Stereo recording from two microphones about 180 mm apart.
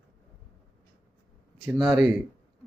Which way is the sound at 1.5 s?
5° left (ahead or behind).